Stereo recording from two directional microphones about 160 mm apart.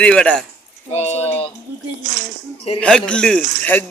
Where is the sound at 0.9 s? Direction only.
40° left (ahead or behind).